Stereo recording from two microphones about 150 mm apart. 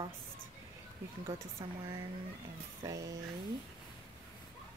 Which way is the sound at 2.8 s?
25° right (ahead or behind).